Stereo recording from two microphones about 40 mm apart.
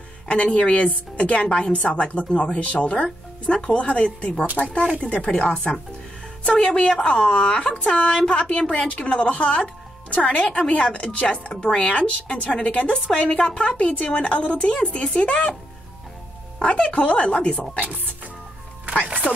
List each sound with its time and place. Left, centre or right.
0.3 s a woman's voice: left
16.6 s a woman's voice: left
19.2 s chopping: centre